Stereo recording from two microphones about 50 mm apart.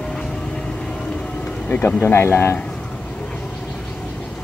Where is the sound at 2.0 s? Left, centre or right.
Left.